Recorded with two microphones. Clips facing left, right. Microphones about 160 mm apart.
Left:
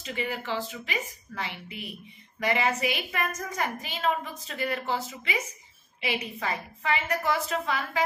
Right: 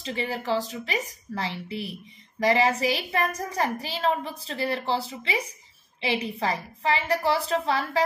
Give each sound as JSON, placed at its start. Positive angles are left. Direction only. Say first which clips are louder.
{"t": 0.0, "sound": "a woman's voice", "louder": "right 3 dB", "side_deg": -30}